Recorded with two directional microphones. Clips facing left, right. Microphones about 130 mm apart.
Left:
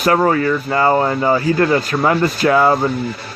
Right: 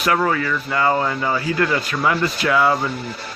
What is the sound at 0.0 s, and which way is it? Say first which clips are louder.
Speech: left 5 dB; 40° left (ahead or behind).